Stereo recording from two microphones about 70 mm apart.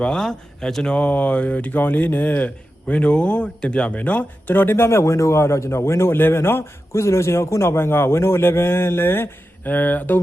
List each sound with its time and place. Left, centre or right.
0.0 s speech: centre; by 10.2 s left